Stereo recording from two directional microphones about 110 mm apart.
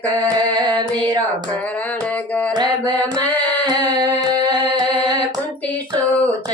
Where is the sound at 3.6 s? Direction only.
40° right (ahead or behind).